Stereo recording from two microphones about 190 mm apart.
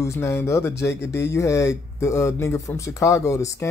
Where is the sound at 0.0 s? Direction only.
15° left (ahead or behind).